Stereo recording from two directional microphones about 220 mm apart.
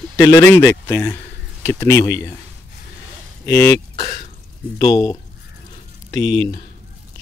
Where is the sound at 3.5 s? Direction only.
15° left (ahead or behind).